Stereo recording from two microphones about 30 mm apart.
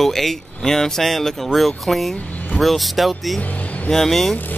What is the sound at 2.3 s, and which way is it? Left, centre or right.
Vehicle, left.